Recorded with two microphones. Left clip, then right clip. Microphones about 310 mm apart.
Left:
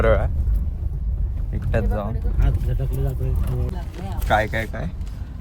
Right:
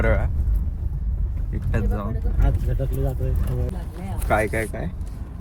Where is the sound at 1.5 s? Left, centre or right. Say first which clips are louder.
Left 4 dB; centre.